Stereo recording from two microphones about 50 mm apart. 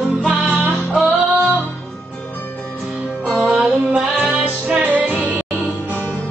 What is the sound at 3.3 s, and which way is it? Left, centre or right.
Music, right.